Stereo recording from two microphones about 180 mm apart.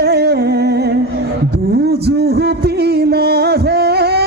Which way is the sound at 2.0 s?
65° right (ahead or behind).